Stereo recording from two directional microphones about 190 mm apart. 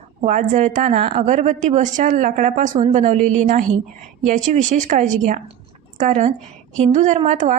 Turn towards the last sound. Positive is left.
turn(degrees=-40)  # may be behind; listen again after turning